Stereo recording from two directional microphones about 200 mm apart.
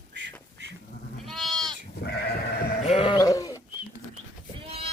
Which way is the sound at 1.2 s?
Centre (ahead or behind).